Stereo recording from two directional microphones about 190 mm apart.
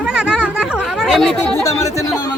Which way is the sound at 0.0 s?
5° right (ahead or behind).